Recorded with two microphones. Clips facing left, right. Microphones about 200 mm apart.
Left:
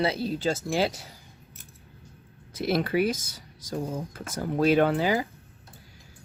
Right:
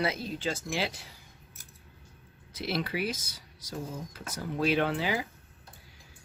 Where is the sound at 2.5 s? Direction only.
50° left (ahead or behind).